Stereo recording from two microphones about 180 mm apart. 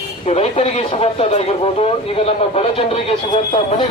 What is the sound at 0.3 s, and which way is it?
Speech, 35° left (ahead or behind).